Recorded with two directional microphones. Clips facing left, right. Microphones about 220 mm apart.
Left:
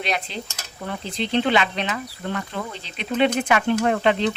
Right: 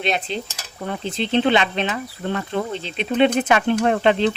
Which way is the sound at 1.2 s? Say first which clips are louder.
Right 2 dB; 25° right (ahead or behind).